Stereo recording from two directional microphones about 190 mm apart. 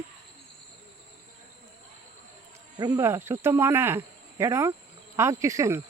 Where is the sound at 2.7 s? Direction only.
15° right (ahead or behind).